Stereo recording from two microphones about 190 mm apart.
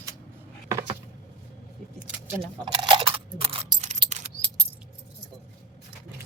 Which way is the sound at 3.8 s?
40° right (ahead or behind).